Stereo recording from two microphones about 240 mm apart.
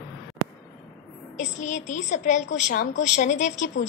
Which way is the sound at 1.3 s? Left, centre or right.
Left.